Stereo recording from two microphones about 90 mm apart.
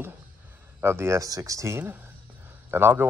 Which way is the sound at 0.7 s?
25° right (ahead or behind).